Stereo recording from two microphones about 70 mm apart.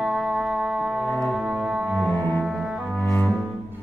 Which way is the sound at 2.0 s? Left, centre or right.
Left.